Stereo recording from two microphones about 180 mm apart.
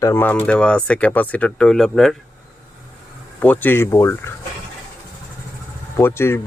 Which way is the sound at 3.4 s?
10° left (ahead or behind).